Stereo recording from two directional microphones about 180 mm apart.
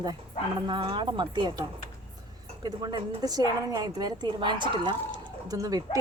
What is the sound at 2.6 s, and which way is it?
A woman's voice, 20° right (ahead or behind).